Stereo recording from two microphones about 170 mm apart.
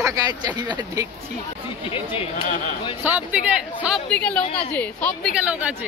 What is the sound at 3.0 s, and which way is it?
Speech, 10° right (ahead or behind).